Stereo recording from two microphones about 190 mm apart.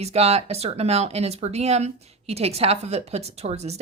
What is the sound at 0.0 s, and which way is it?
Speech, 35° right (ahead or behind).